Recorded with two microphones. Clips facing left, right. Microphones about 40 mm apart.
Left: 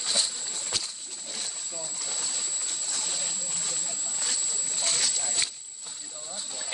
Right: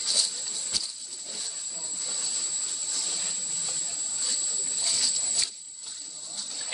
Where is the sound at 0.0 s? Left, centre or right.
Left.